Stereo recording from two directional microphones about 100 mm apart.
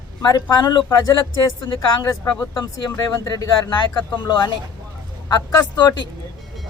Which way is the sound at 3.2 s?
35° left (ahead or behind).